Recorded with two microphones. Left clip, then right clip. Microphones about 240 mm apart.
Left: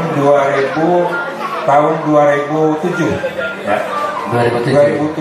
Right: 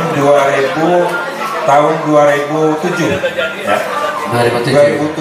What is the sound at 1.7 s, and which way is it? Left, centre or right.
Speech, centre.